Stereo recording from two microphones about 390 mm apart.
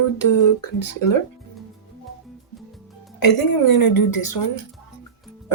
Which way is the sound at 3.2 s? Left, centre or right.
Left.